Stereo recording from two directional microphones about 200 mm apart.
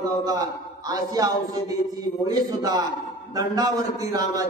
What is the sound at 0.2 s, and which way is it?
A man's voice, 20° right (ahead or behind).